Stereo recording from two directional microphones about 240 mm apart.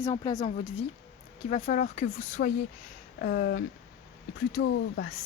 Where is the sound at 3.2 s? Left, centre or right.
Left.